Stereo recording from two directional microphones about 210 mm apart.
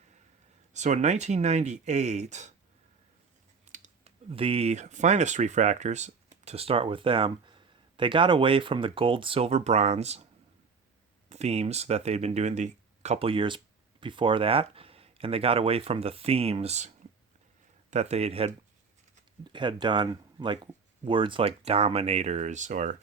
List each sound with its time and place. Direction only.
0.7 s speech: 35° right (ahead or behind)
3.7 s speech: 35° right (ahead or behind)
11.3 s speech: 30° right (ahead or behind)
17.9 s speech: 30° right (ahead or behind)